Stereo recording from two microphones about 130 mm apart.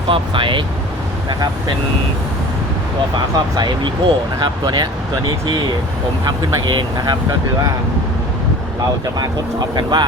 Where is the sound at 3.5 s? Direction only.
35° right (ahead or behind).